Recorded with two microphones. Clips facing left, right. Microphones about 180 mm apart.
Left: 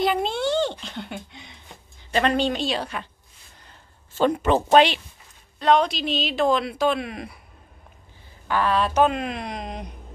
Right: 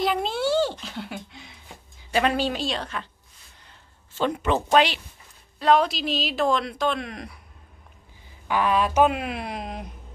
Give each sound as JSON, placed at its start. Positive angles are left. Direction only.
{"t": 0.0, "sound": "a sound", "side_deg": 0}
{"t": 2.0, "sound": "a woman's voice", "side_deg": -5}
{"t": 4.2, "sound": "speech", "side_deg": 40}
{"t": 5.6, "sound": "a woman's voice", "side_deg": -5}
{"t": 8.5, "sound": "a woman's voice", "side_deg": -15}